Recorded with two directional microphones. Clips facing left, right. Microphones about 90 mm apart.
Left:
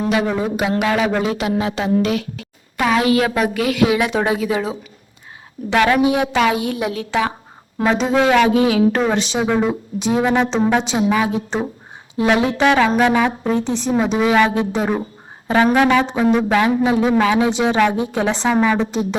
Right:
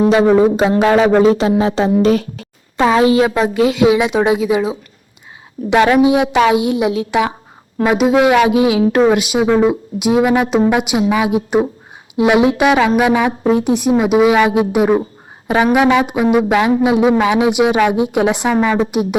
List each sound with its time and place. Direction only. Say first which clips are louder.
0.1 s speech: right 8 dB; 30° right (ahead or behind); by 19.0 s 15° right (ahead or behind)